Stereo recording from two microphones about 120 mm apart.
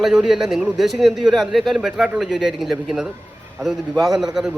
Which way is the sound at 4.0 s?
5° right (ahead or behind).